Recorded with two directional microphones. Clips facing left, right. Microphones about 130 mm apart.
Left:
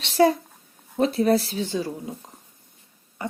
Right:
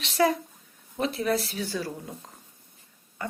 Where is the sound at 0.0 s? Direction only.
30° left (ahead or behind).